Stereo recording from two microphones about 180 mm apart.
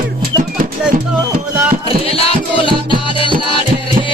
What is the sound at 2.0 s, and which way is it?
Music, 30° left (ahead or behind).